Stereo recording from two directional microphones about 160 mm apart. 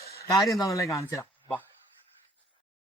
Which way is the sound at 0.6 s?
20° left (ahead or behind).